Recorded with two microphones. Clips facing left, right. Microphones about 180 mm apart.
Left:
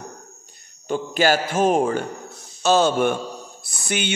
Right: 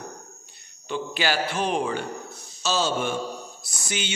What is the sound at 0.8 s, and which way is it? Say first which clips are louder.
A man's voice: left 7 dB; 45° left (ahead or behind).